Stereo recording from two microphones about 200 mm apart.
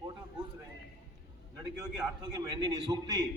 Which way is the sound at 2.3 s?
20° right (ahead or behind).